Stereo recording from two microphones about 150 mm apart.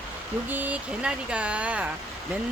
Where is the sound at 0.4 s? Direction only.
10° right (ahead or behind).